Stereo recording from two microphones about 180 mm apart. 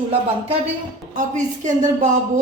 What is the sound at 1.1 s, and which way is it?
Speech, 45° right (ahead or behind).